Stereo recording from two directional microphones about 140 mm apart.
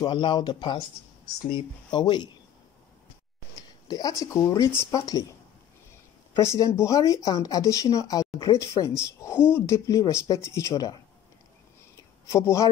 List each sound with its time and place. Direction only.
0.0 s speech: 35° left (ahead or behind)
3.8 s speech: 25° left (ahead or behind)
6.3 s speech: 20° left (ahead or behind)
12.3 s speech: 20° left (ahead or behind)